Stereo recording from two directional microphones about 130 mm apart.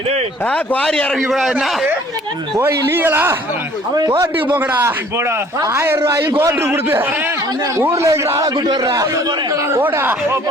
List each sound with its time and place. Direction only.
0.4 s a man's voice: 10° left (ahead or behind)
2.6 s a man's voice: 20° right (ahead or behind)
3.9 s speech: 30° right (ahead or behind)
4.2 s a man's voice: 15° right (ahead or behind)
9.8 s a man's voice: 15° right (ahead or behind)